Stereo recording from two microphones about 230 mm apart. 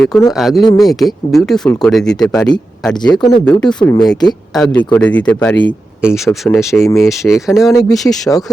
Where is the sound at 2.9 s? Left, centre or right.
Centre.